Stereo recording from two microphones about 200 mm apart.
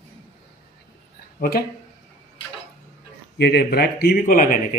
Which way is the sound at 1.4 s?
50° left (ahead or behind).